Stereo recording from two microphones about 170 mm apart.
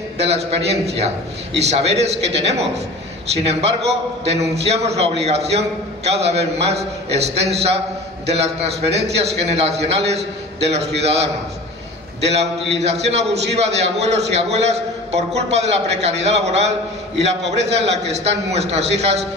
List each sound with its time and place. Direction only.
0.2 s a man's voice: 40° right (ahead or behind)
12.3 s a man's voice: 40° right (ahead or behind)